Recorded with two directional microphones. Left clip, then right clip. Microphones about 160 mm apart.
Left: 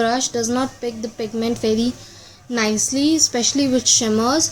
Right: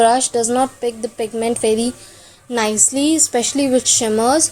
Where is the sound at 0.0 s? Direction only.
20° right (ahead or behind).